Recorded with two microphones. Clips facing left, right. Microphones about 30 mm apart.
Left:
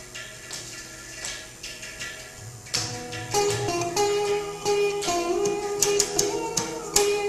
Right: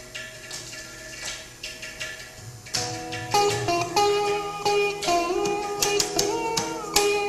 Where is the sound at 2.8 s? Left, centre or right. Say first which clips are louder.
Right 3 dB; centre.